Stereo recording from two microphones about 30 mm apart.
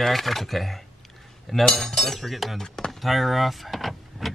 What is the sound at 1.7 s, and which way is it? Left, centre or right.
Speech, centre.